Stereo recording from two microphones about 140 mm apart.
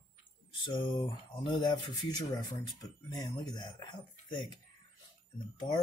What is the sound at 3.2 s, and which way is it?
Speech, 30° left (ahead or behind).